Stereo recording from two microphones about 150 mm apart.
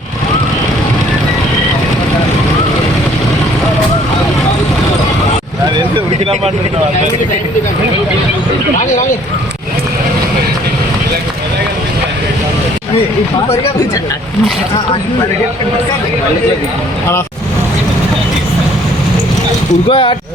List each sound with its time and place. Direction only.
19.9 s speech: 35° left (ahead or behind)